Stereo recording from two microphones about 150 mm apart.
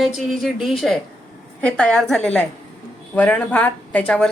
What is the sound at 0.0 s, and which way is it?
A woman's voice, centre (ahead or behind).